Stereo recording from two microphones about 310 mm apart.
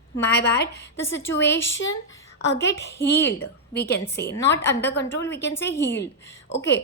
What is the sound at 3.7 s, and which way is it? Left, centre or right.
A woman's voice, left.